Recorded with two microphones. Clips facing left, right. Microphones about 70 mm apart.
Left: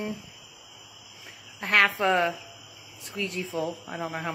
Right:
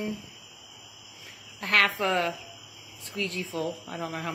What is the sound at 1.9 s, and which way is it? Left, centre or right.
Speech, centre.